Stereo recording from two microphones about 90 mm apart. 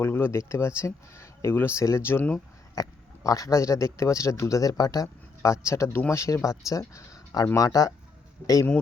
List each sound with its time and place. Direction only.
0.0 s speech: 25° left (ahead or behind)
2.7 s speech: 40° left (ahead or behind)